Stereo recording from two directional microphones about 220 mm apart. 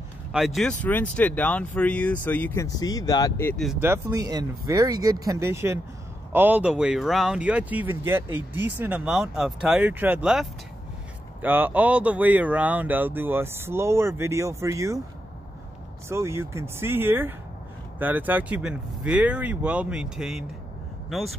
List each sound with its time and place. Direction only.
0.3 s speech: centre (ahead or behind)
3.6 s speech: 10° right (ahead or behind)
16.1 s speech: 10° right (ahead or behind)